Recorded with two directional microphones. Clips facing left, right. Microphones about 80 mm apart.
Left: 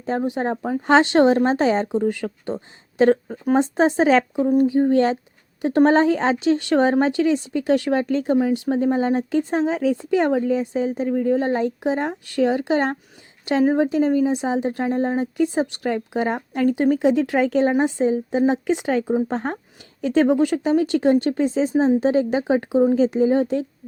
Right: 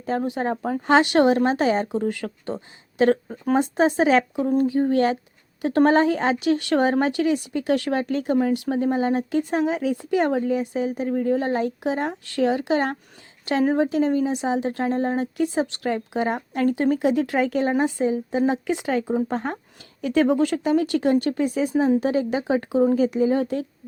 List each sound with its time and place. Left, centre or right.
0.2 s speech: left
0.6 s speech: centre
0.9 s speech: left